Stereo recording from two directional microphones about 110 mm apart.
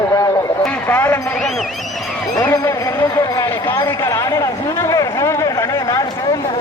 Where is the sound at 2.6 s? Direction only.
25° left (ahead or behind).